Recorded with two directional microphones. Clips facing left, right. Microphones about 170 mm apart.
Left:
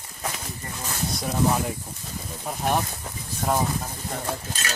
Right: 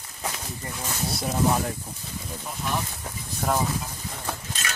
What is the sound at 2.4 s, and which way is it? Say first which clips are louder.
Speech: left 6 dB; 55° left (ahead or behind).